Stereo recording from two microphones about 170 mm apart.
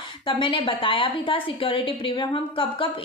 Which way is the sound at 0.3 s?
30° left (ahead or behind).